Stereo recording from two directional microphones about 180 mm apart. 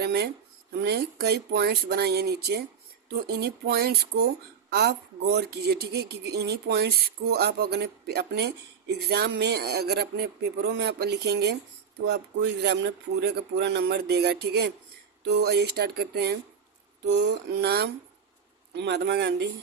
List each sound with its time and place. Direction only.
0.0 s speech: 65° right (ahead or behind)